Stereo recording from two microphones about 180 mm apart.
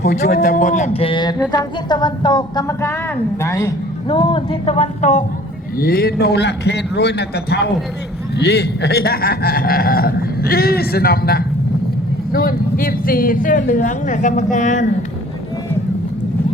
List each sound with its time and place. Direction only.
0.3 s a woman's voice: 60° left (ahead or behind); by 3.7 s 15° left (ahead or behind)
4.2 s speech: 30° left (ahead or behind)
5.7 s a man's voice: 55° left (ahead or behind)